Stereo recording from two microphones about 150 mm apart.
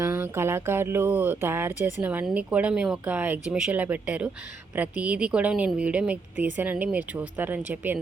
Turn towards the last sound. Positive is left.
turn(degrees=-10)  # may be behind; listen again after turning